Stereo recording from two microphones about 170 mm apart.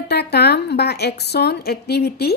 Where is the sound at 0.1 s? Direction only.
75° left (ahead or behind).